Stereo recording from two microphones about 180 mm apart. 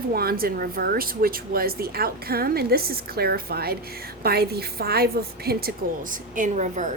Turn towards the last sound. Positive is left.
turn(degrees=-45)  # may be behind; listen again after turning